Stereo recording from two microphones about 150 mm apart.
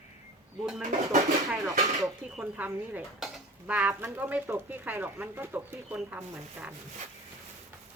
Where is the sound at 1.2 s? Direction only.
25° right (ahead or behind).